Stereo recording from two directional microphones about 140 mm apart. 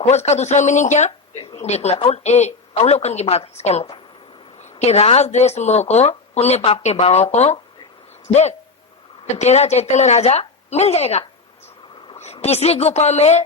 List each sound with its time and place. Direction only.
0.0 s speech: 50° left (ahead or behind)